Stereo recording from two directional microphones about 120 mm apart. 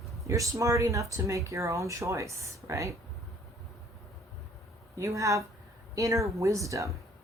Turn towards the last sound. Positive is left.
turn(degrees=-25)  # may be behind; listen again after turning